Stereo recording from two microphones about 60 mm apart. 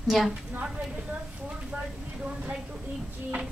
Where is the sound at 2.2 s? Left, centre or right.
Centre.